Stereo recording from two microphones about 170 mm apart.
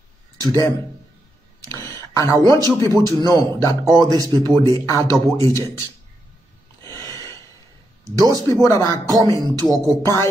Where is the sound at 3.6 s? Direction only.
20° right (ahead or behind).